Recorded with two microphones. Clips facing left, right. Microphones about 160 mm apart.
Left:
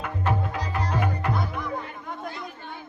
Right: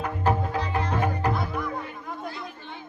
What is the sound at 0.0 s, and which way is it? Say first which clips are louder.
Music: right 2 dB; 35° right (ahead or behind).